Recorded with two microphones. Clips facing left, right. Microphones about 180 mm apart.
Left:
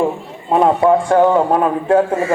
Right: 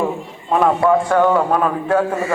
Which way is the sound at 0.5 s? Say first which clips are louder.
Left 2 dB; 30° left (ahead or behind).